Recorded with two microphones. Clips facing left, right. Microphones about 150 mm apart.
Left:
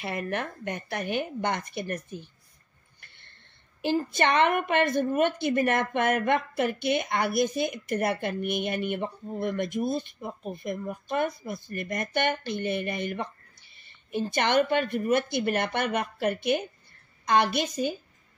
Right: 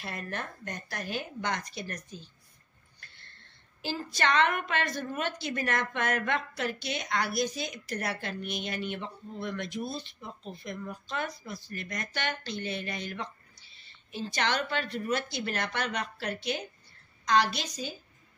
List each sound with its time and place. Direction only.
0.0 s a woman's voice: 65° left (ahead or behind)
3.8 s a woman's voice: 55° left (ahead or behind)